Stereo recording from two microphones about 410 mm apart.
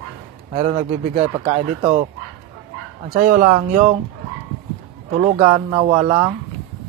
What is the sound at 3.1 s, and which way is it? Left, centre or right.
Speech, centre.